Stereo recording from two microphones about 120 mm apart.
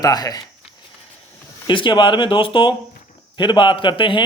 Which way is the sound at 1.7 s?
45° left (ahead or behind).